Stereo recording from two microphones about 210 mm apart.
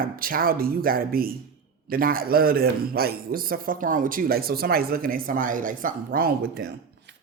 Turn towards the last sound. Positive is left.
turn(degrees=-45)  # may be behind; listen again after turning